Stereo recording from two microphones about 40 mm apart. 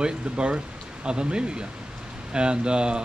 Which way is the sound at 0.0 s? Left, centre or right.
Right.